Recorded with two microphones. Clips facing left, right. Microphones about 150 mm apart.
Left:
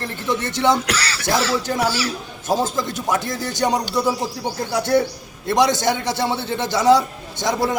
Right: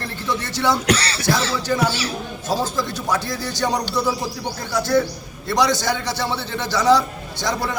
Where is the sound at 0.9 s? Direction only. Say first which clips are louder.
Right 4 dB; 30° right (ahead or behind).